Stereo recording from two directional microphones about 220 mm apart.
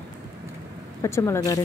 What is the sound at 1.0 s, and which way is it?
Speech, 15° left (ahead or behind).